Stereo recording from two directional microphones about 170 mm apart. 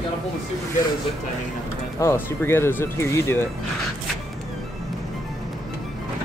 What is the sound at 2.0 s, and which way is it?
Speech, 15° left (ahead or behind).